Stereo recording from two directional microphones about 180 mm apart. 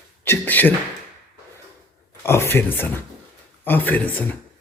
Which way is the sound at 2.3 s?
15° left (ahead or behind).